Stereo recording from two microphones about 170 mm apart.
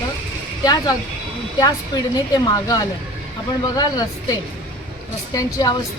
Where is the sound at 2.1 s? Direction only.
25° left (ahead or behind).